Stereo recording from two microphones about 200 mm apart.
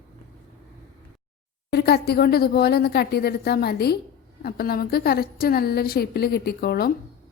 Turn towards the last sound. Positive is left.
turn(degrees=50)  # may be behind; listen again after turning